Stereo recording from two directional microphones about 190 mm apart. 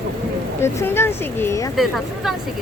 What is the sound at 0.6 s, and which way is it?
Speech, 15° left (ahead or behind).